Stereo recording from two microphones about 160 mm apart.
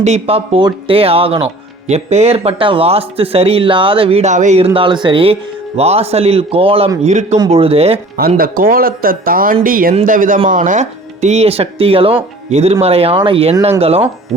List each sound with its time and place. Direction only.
0.0 s speech: 40° right (ahead or behind)
8.4 s speech: 60° right (ahead or behind); by 14.1 s 40° right (ahead or behind)